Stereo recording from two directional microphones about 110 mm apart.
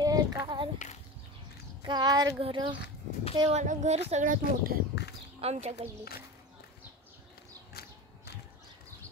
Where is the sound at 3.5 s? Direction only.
90° right.